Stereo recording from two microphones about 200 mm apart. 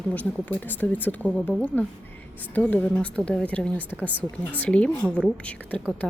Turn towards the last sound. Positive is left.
turn(degrees=5)  # may be behind; listen again after turning